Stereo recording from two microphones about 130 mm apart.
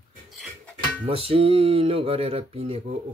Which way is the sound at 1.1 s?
45° right (ahead or behind).